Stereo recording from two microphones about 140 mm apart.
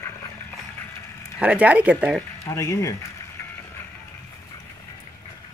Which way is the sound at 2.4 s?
20° left (ahead or behind).